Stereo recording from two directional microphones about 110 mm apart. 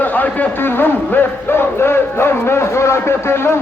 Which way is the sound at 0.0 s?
15° left (ahead or behind).